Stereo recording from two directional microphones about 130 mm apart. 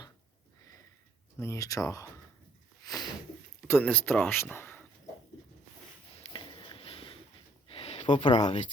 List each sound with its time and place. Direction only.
1.4 s speech: 25° left (ahead or behind)
2.8 s a sound: 30° left (ahead or behind)
3.7 s speech: 15° left (ahead or behind)
6.3 s sniff: 40° left (ahead or behind)
7.7 s a sound: 45° left (ahead or behind)
8.3 s speech: 65° left (ahead or behind)